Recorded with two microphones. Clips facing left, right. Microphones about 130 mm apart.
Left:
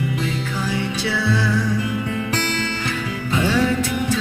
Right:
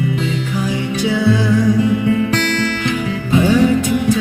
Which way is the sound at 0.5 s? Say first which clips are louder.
Right 5 dB; 15° right (ahead or behind).